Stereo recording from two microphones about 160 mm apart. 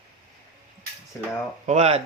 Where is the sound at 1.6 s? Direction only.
45° right (ahead or behind).